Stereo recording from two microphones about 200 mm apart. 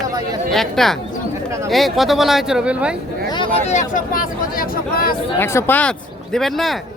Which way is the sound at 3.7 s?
40° left (ahead or behind).